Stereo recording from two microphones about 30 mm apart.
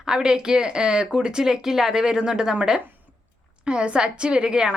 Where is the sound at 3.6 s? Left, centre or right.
Right.